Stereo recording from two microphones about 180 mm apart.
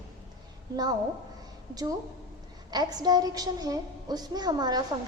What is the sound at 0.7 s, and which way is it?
Speech, 20° right (ahead or behind).